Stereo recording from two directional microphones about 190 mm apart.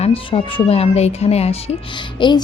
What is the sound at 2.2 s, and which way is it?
Music, 25° left (ahead or behind).